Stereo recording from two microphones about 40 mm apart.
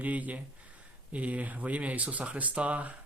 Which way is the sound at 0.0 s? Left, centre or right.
Right.